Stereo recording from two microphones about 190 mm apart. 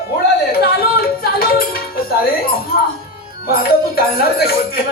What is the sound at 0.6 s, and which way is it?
Music, 55° left (ahead or behind).